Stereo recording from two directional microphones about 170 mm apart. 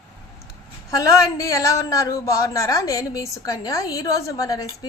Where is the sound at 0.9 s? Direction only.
20° left (ahead or behind).